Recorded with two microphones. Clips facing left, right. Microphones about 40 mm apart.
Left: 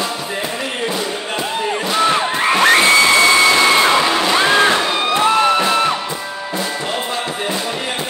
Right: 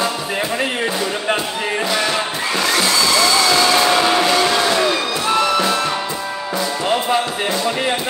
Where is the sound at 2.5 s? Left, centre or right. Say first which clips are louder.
Left 7 dB; left.